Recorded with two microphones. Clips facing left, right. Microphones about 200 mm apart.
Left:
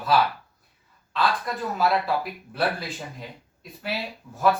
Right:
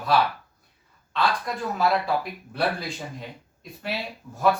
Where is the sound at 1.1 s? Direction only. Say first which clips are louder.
Even; centre (ahead or behind).